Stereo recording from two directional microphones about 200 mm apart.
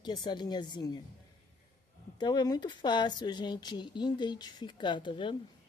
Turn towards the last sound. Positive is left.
turn(degrees=25)  # may be behind; listen again after turning